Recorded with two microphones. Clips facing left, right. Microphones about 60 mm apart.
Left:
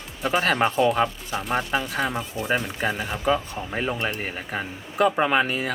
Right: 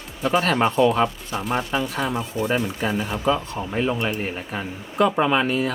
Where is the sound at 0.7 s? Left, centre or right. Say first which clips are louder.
Right 3 dB; right.